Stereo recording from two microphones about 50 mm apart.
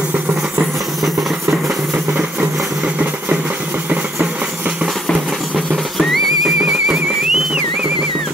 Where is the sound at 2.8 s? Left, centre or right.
Right.